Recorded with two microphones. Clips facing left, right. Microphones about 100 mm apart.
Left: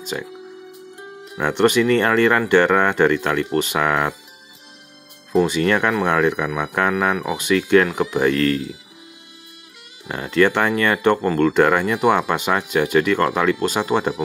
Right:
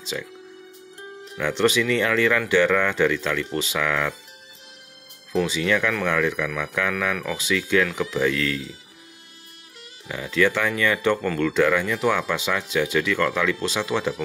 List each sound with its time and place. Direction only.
1.4 s speech: 55° left (ahead or behind)
5.3 s speech: 50° left (ahead or behind)
10.0 s speech: 55° left (ahead or behind)